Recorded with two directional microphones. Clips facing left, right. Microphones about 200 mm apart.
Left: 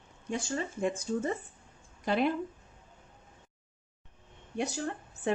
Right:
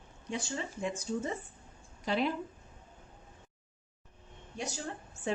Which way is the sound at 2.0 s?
55° left (ahead or behind).